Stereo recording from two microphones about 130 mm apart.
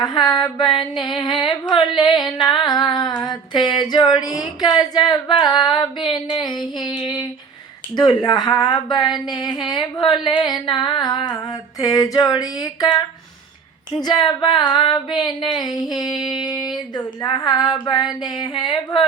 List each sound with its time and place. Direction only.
0.0 s a woman's voice: 35° left (ahead or behind)
14.0 s a woman's voice: 35° left (ahead or behind)
16.0 s a sound: 5° right (ahead or behind)
16.5 s a woman's voice: 35° left (ahead or behind)